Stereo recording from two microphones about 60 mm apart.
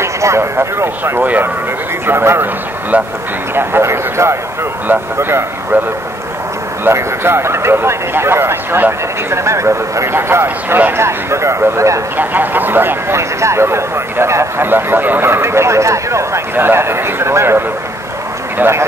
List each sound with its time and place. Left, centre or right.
0.0 s speech: right
1.2 s speech: right
2.0 s speech: right
3.5 s speech: right
4.8 s speech: right
6.8 s speech: right
10.1 s speech: right
12.2 s speech: right
13.1 s speech: right
14.7 s speech: right
16.5 s speech: right